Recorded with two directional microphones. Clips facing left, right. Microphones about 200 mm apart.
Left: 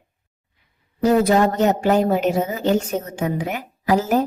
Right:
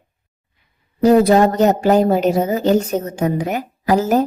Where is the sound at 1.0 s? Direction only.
35° right (ahead or behind).